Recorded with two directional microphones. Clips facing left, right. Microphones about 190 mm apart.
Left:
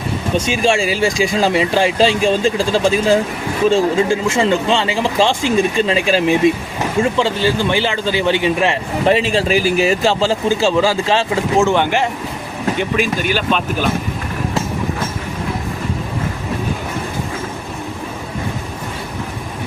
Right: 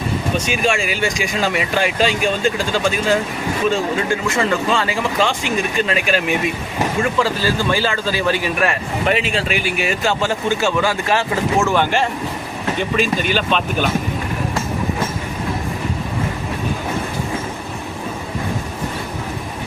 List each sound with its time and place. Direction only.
0.3 s a man's voice: 30° left (ahead or behind); by 13.8 s 5° left (ahead or behind)